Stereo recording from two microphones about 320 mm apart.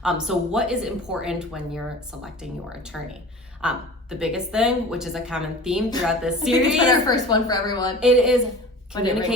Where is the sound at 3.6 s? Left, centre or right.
Centre.